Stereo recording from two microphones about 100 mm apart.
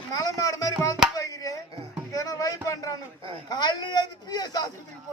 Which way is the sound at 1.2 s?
35° left (ahead or behind).